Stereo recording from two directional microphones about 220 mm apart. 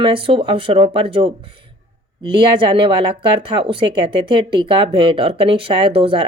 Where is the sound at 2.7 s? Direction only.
20° right (ahead or behind).